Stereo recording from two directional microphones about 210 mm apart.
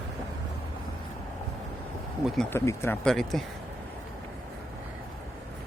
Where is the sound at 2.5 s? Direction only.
10° left (ahead or behind).